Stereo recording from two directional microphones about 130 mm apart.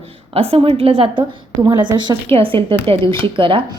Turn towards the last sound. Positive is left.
turn(degrees=-40)  # may be behind; listen again after turning